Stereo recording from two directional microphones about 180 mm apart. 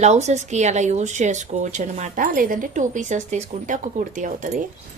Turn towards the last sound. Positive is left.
turn(degrees=-45)  # may be behind; listen again after turning